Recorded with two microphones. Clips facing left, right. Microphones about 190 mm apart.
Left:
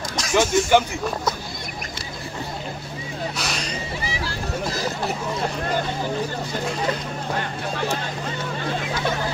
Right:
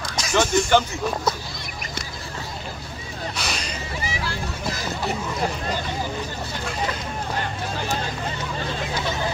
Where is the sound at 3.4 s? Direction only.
Centre (ahead or behind).